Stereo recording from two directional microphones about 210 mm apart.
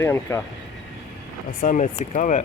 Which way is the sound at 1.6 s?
35° left (ahead or behind).